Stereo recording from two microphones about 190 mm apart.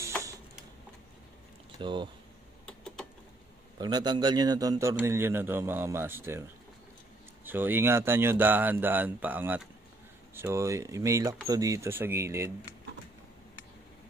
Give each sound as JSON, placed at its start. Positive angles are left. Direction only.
{"t": 1.8, "sound": "speech", "side_deg": -25}
{"t": 3.7, "sound": "a man's voice", "side_deg": -20}